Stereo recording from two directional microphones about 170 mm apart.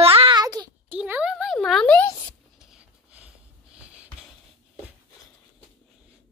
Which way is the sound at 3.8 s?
5° right (ahead or behind).